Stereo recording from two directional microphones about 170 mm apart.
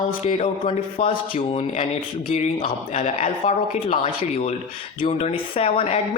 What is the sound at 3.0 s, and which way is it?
Speech, 40° left (ahead or behind).